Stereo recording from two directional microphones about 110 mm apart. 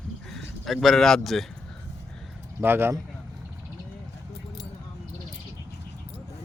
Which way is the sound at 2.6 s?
20° right (ahead or behind).